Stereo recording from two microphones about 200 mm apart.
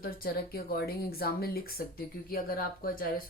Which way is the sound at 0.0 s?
50° left (ahead or behind).